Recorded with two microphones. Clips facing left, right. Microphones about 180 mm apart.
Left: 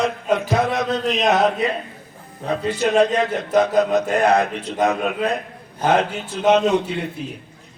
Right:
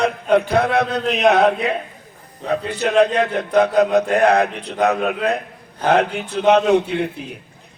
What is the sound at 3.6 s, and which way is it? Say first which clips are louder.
A man's voice: right 5 dB; 60° right (ahead or behind).